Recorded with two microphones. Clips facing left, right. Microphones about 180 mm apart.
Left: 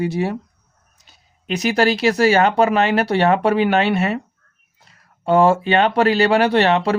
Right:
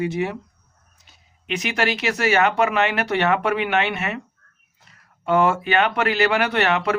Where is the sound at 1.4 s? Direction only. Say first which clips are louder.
Left 6 dB; 35° left (ahead or behind).